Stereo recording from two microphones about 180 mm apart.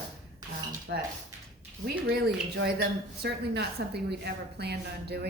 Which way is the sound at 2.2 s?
65° right (ahead or behind).